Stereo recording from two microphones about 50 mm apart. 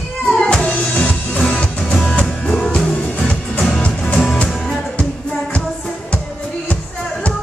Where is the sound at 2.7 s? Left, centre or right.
Centre.